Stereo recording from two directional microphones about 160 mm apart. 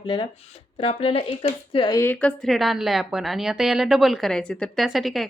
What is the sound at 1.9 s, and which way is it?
A woman's voice, 15° left (ahead or behind).